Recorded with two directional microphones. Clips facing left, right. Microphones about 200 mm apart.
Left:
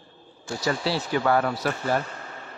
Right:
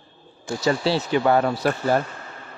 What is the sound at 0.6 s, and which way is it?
Speech, 25° right (ahead or behind).